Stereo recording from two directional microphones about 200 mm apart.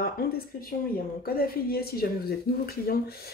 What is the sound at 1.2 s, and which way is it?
Speech, 50° left (ahead or behind).